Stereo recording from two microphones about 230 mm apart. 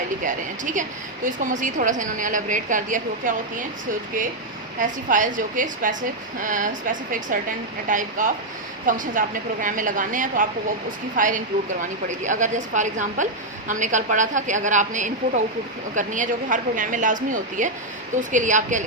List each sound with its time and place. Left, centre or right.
0.3 s a woman's voice: right
4.8 s a woman's voice: right